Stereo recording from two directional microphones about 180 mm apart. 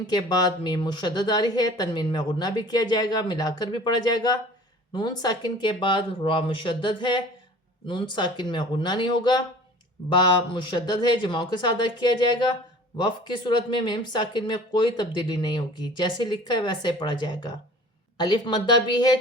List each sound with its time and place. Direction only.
0.1 s speech: 25° left (ahead or behind)